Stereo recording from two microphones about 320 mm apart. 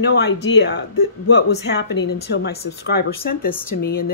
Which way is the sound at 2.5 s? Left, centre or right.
Left.